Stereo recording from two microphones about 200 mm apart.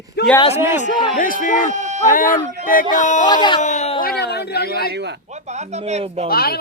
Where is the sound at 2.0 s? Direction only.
45° left (ahead or behind).